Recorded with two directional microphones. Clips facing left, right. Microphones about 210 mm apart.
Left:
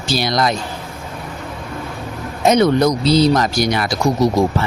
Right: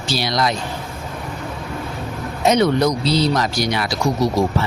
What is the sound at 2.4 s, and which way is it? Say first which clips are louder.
Speech: left 3 dB; 45° left (ahead or behind).